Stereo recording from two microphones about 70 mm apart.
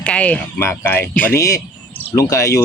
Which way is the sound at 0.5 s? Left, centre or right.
Left.